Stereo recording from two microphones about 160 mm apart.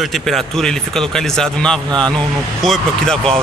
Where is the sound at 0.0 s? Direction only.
Centre (ahead or behind).